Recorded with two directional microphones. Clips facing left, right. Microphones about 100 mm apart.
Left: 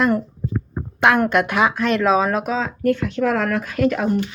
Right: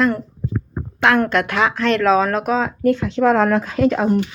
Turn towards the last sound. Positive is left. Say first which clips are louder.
# right 2 dB
turn(degrees=-20)  # may be behind; listen again after turning